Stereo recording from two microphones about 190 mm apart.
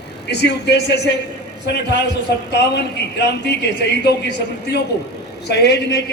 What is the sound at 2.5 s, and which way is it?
A man's voice, 65° left (ahead or behind).